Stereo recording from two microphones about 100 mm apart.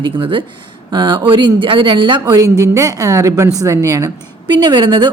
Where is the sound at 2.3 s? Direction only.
35° right (ahead or behind).